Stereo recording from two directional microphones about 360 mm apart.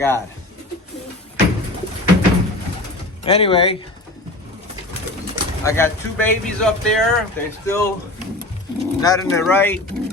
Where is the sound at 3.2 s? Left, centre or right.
Centre.